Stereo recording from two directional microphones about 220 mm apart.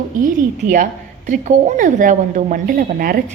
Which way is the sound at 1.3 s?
35° right (ahead or behind).